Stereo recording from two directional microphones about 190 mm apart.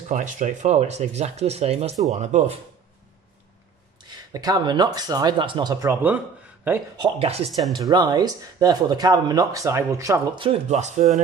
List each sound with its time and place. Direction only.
0.1 s speech: 40° right (ahead or behind)
4.3 s speech: 20° right (ahead or behind)
7.0 s speech: 30° right (ahead or behind)
7.8 s speech: 20° right (ahead or behind)
10.4 s speech: 35° right (ahead or behind)